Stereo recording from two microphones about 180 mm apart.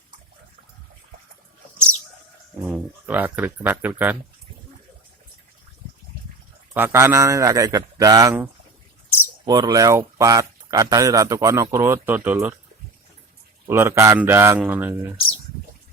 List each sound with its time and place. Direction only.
2.6 s a man's voice: 10° right (ahead or behind)
6.7 s a man's voice: 15° right (ahead or behind)
9.4 s speech: 25° right (ahead or behind)
13.7 s a man's voice: 15° right (ahead or behind)